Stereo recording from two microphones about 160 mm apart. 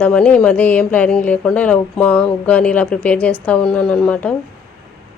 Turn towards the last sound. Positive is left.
turn(degrees=5)  # may be behind; listen again after turning